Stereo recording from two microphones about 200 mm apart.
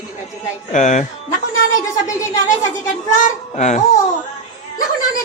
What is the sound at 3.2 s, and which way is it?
Speech, 35° left (ahead or behind).